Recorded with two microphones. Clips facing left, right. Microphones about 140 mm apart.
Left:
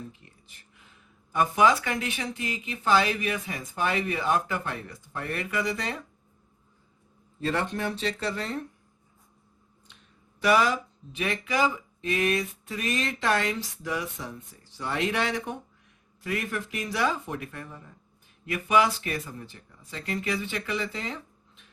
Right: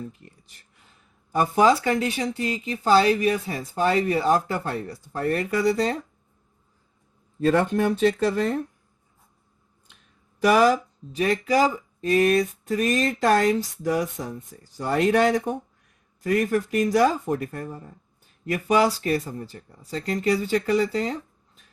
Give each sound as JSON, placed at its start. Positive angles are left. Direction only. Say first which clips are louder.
{"t": 1.3, "sound": "speech", "louder": "right 3 dB", "side_deg": -35}
{"t": 7.4, "sound": "speech", "louder": "right 8 dB", "side_deg": -45}
{"t": 10.4, "sound": "speech", "louder": "right 5 dB", "side_deg": -45}